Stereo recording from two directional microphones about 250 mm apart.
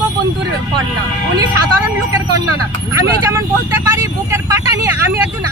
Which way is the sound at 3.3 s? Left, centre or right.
Centre.